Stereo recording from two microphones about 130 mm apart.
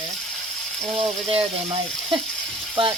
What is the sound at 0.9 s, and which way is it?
Speech, 45° right (ahead or behind).